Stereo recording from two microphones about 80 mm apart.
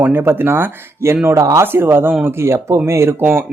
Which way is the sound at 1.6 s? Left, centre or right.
Right.